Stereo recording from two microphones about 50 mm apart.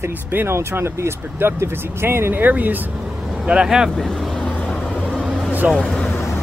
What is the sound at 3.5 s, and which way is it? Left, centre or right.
Speech, centre.